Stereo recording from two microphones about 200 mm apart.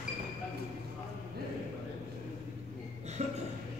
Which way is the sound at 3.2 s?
35° right (ahead or behind).